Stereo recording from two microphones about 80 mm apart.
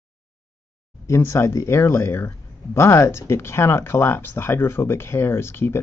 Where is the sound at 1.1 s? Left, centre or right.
Left.